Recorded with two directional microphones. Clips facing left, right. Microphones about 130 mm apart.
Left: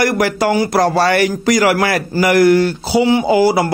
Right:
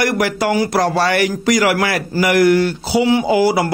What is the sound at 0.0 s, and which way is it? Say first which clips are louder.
A man's voice: left 2 dB; 35° left (ahead or behind).